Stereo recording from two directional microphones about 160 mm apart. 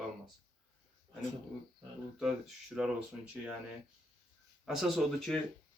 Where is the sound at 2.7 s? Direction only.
5° right (ahead or behind).